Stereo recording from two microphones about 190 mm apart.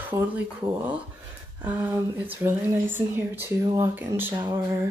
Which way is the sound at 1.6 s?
10° right (ahead or behind).